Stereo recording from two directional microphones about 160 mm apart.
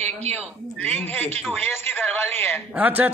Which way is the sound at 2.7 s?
10° right (ahead or behind).